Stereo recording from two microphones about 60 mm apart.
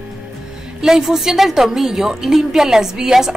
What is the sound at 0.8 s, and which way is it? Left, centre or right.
A woman's voice, centre.